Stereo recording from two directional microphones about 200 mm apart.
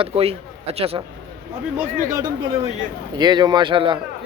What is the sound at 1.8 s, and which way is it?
Speech, 15° right (ahead or behind).